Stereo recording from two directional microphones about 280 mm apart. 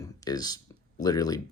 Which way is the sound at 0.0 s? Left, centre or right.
Centre.